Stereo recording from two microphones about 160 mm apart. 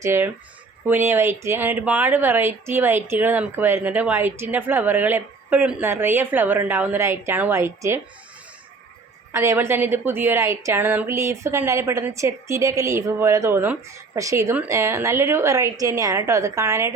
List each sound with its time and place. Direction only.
0.0 s speech: 15° right (ahead or behind)
9.3 s speech: 15° right (ahead or behind)